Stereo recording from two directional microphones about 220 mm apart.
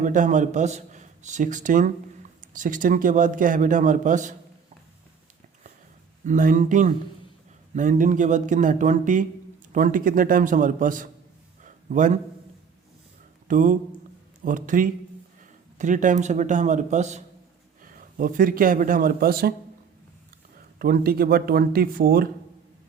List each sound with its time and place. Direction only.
0.0 s a man's voice: 35° right (ahead or behind)
6.2 s speech: 40° right (ahead or behind)
11.6 s a sound: 35° right (ahead or behind)
13.5 s a man's voice: 35° right (ahead or behind)
20.7 s speech: 40° right (ahead or behind)